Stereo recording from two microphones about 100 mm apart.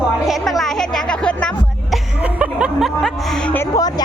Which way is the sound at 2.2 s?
15° right (ahead or behind).